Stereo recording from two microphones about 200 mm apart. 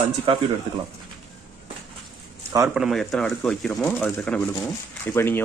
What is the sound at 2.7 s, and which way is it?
Speech, centre (ahead or behind).